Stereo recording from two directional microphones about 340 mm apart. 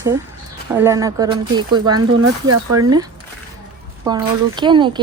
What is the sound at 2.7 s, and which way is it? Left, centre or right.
A woman's voice, centre.